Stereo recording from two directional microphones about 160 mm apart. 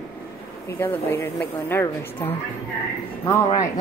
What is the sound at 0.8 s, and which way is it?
Speech, 15° left (ahead or behind).